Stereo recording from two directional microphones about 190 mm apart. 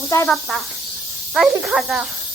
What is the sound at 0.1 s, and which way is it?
Speech, 15° left (ahead or behind).